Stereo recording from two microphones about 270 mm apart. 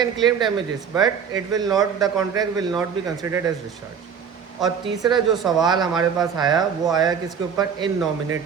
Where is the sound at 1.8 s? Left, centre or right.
Centre.